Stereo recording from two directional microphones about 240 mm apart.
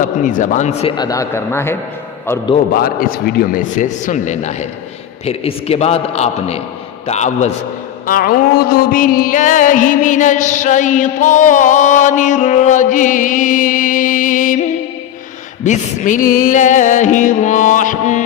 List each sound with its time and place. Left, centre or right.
0.0 s a man's voice: left; by 2.6 s centre
2.7 s music: left
5.2 s a man's voice: left
8.0 s music: left